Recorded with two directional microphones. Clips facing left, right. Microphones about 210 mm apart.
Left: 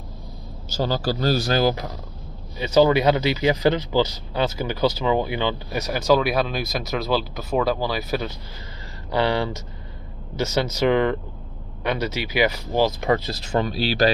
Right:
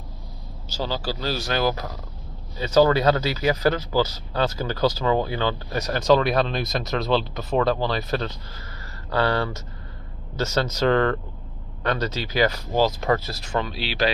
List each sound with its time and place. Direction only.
0.7 s speech: 45° left (ahead or behind)
2.5 s speech: 15° left (ahead or behind)
5.8 s speech: 5° left (ahead or behind); by 13.6 s 25° left (ahead or behind)
13.6 s speech: 40° left (ahead or behind)